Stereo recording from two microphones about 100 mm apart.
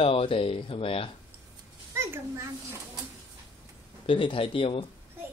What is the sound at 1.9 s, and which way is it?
Speech, 25° right (ahead or behind).